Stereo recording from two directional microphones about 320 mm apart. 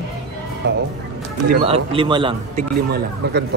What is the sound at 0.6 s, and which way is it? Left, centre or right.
Speech, right.